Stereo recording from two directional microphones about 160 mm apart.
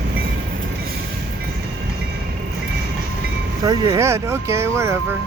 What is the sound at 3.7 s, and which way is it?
Speech, 20° right (ahead or behind).